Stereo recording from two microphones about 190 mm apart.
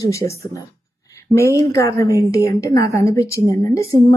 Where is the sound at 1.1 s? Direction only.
15° left (ahead or behind).